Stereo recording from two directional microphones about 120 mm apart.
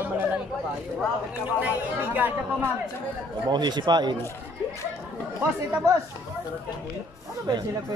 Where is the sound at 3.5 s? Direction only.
35° right (ahead or behind).